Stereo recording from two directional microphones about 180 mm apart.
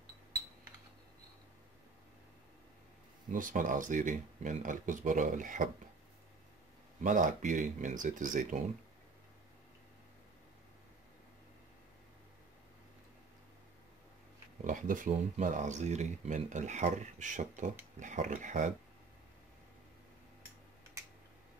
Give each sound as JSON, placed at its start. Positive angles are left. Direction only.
{"t": 3.3, "sound": "speech", "side_deg": -50}
{"t": 7.0, "sound": "speech", "side_deg": -45}
{"t": 14.6, "sound": "speech", "side_deg": -45}